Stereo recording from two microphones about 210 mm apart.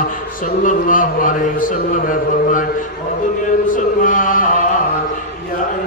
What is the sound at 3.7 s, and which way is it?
Mantra, 40° left (ahead or behind).